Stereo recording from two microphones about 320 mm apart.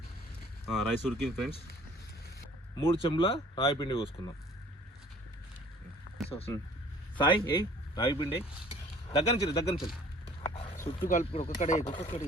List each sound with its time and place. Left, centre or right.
0.7 s speech: centre
2.7 s speech: centre
6.3 s speech: centre
10.2 s dog: centre
11.1 s speech: centre